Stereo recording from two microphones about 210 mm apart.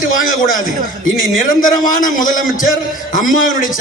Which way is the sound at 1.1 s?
40° left (ahead or behind).